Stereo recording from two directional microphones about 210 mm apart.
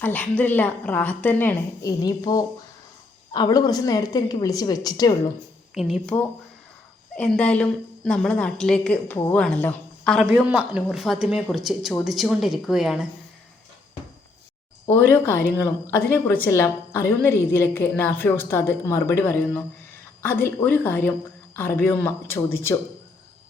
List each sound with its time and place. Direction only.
0.0 s a woman's voice: 10° left (ahead or behind)
5.7 s a woman's voice: centre (ahead or behind)
7.2 s a woman's voice: 5° left (ahead or behind)
14.8 s a woman's voice: 10° left (ahead or behind)